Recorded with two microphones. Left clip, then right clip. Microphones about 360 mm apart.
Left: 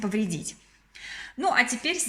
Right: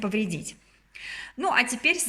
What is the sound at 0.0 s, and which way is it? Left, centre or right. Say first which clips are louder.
A woman's voice: right 1 dB; centre.